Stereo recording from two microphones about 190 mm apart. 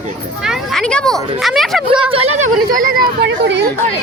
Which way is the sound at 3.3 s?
65° right (ahead or behind).